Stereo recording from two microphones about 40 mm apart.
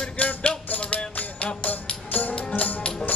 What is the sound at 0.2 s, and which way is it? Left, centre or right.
Music, left.